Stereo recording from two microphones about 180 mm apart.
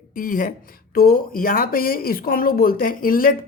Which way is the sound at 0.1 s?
50° left (ahead or behind).